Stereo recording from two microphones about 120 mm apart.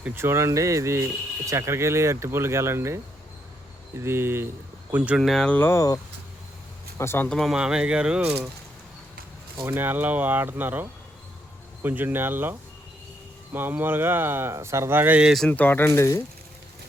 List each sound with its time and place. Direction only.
0.0 s speech: 20° right (ahead or behind)
4.0 s speech: 20° right (ahead or behind)
5.2 s speech: 5° left (ahead or behind)
5.5 s speech: 20° left (ahead or behind)
7.0 s speech: 20° left (ahead or behind)
7.3 s speech: centre (ahead or behind)
9.6 s speech: 15° right (ahead or behind)
15.4 s speech: 15° left (ahead or behind)